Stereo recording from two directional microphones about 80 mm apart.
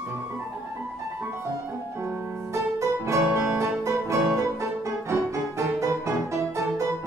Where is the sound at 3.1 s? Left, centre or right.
Right.